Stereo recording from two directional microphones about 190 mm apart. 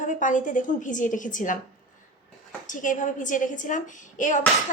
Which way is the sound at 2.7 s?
45° left (ahead or behind).